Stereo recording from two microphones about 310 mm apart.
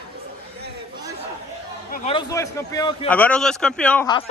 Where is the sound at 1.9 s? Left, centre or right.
Centre.